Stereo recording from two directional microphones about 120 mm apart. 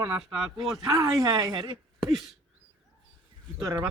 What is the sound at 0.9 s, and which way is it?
Speech, 35° right (ahead or behind).